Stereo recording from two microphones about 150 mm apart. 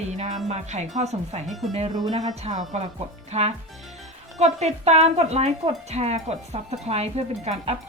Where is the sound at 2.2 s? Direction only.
50° right (ahead or behind).